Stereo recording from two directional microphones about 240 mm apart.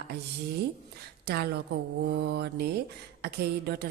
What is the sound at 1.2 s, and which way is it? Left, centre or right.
A woman's voice, right.